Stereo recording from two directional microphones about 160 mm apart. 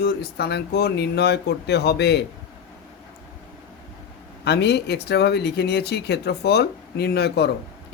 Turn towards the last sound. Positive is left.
turn(degrees=90)